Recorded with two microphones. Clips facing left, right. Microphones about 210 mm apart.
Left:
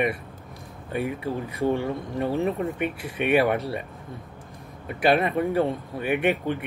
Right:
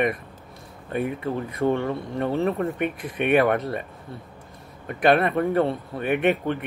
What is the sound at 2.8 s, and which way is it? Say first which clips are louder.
Speech: right 1 dB; 55° right (ahead or behind).